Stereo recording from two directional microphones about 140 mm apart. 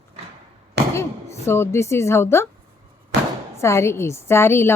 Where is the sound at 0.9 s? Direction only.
20° left (ahead or behind).